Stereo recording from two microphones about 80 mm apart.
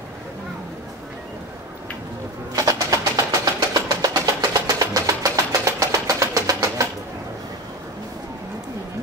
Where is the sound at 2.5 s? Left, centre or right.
Right.